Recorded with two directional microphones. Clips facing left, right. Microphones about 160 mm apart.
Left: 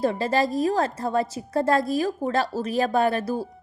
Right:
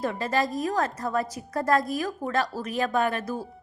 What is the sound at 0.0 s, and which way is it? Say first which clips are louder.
A woman's voice: left 4 dB; 30° left (ahead or behind).